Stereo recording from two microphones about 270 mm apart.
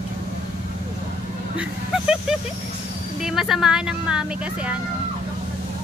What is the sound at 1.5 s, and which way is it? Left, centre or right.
Vehicle, centre.